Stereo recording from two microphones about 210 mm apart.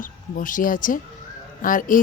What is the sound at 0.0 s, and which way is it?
Speech, 40° left (ahead or behind).